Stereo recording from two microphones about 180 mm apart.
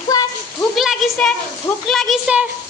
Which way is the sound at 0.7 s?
Centre (ahead or behind).